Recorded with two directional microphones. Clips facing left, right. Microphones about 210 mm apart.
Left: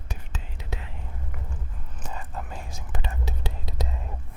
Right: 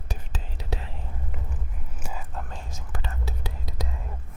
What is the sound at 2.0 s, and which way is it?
Whispering, 10° right (ahead or behind).